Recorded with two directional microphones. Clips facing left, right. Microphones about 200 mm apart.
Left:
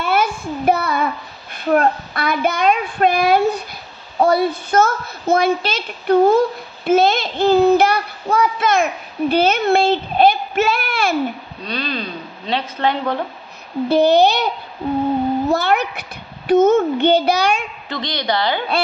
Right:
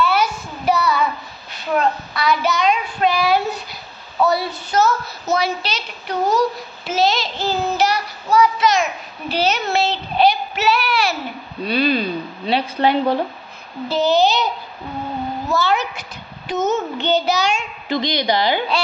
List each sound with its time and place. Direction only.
0.0 s child singing: 50° left (ahead or behind)
4.2 s a child's voice: 50° left (ahead or behind)
9.3 s child singing: 55° left (ahead or behind)
11.6 s speech: 10° right (ahead or behind)
13.8 s a child's voice: 60° left (ahead or behind)
17.8 s speech: 10° right (ahead or behind)